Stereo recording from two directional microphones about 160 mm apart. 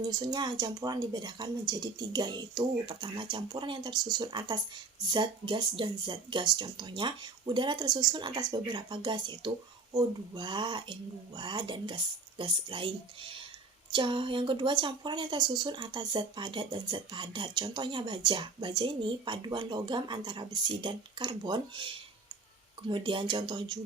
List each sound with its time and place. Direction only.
0.1 s a woman's voice: 25° right (ahead or behind)